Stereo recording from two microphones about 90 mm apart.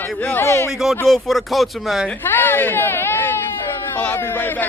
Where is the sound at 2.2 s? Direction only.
25° left (ahead or behind).